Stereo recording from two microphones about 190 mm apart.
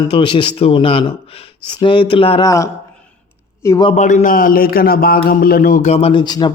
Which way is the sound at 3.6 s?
15° left (ahead or behind).